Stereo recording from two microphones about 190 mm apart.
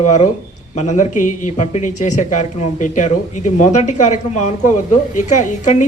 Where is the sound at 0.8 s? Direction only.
40° left (ahead or behind).